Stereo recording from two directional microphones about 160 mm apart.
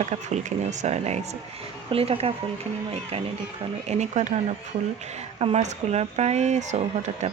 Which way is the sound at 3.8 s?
45° right (ahead or behind).